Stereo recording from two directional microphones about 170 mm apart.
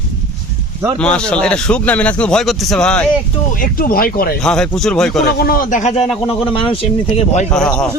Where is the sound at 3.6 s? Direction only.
60° left (ahead or behind).